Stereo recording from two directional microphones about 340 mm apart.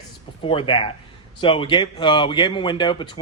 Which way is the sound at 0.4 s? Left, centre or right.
Centre.